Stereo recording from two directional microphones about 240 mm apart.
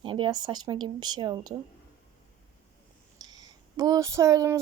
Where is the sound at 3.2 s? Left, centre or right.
Centre.